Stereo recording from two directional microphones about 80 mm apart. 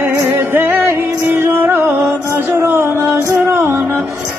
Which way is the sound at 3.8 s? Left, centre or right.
Centre.